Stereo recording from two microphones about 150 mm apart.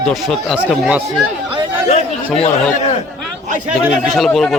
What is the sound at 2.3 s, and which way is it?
Speech, 40° left (ahead or behind).